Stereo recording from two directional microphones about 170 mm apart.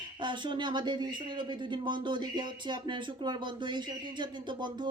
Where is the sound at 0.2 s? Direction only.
25° right (ahead or behind).